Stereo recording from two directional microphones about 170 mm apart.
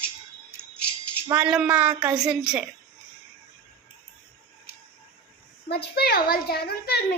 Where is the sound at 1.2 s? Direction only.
10° right (ahead or behind).